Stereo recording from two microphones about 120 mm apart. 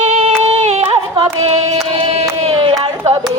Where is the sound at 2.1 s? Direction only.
60° right (ahead or behind).